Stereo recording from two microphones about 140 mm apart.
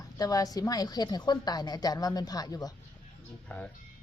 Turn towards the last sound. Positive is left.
turn(degrees=10)  # may be behind; listen again after turning